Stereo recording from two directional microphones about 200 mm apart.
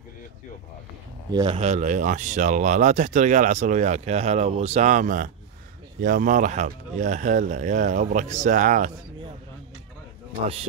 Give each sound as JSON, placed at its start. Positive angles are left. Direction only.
{"t": 1.3, "sound": "speech", "side_deg": -25}